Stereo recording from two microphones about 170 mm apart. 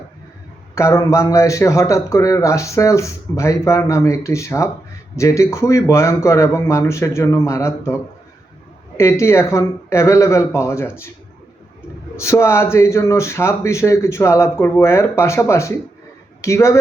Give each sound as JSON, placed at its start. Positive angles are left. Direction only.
{"t": 0.8, "sound": "a man's voice", "side_deg": 15}
{"t": 9.0, "sound": "a man's voice", "side_deg": 15}
{"t": 12.1, "sound": "a man's voice", "side_deg": 15}